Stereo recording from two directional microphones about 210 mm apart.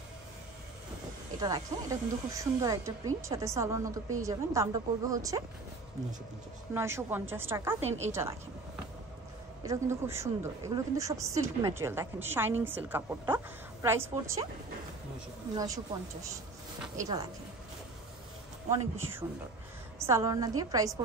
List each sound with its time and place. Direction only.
1.4 s speech: 15° right (ahead or behind)
6.7 s speech: 10° right (ahead or behind)
9.7 s speech: 15° right (ahead or behind)
15.5 s speech: 15° right (ahead or behind)
18.7 s speech: 10° right (ahead or behind)